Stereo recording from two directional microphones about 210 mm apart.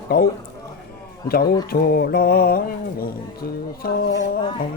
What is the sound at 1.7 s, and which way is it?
Mantra, 45° left (ahead or behind).